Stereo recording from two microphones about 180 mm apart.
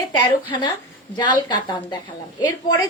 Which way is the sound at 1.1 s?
25° left (ahead or behind).